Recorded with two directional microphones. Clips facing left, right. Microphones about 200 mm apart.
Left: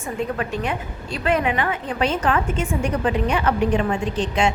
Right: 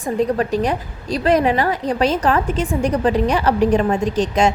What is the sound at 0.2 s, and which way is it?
A woman's voice, 35° right (ahead or behind).